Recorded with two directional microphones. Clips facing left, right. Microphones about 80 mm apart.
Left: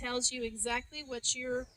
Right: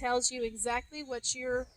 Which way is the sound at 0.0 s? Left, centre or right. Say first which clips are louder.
Right 5 dB; right.